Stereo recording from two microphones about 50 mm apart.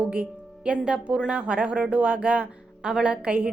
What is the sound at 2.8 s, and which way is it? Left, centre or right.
Speech, centre.